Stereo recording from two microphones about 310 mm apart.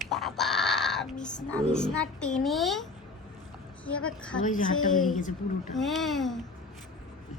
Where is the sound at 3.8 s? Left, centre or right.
Centre.